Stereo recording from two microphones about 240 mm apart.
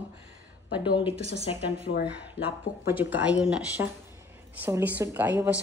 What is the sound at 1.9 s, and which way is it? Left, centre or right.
Speech, left.